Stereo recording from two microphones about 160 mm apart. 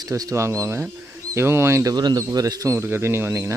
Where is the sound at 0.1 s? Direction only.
20° right (ahead or behind).